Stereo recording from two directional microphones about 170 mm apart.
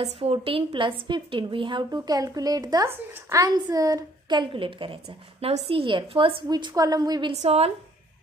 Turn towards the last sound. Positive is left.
turn(degrees=-35)  # may be behind; listen again after turning